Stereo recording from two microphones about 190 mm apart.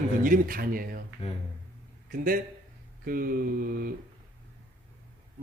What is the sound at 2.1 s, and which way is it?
A man's voice, 50° right (ahead or behind).